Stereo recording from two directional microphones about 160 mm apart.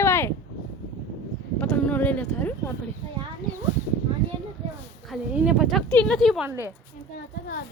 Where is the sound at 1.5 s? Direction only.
10° left (ahead or behind).